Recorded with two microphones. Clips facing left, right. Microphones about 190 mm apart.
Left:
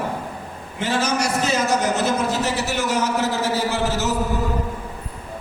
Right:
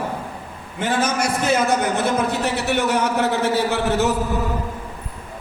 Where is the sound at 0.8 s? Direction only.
55° right (ahead or behind).